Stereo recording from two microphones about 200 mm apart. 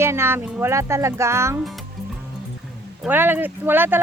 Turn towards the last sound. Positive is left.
turn(degrees=-10)  # may be behind; listen again after turning